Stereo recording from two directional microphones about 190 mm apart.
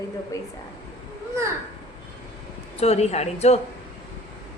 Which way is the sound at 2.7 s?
35° left (ahead or behind).